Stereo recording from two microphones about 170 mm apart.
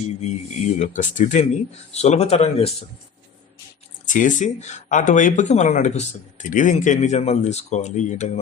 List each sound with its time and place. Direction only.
0.2 s speech: 45° left (ahead or behind)
4.0 s speech: 50° left (ahead or behind)